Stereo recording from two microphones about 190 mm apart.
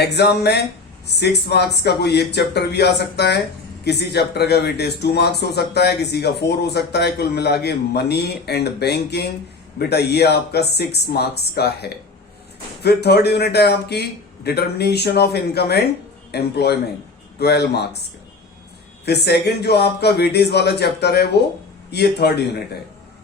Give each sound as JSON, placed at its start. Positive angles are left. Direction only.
{"t": 0.0, "sound": "speech", "side_deg": 60}
{"t": 19.0, "sound": "speech", "side_deg": 60}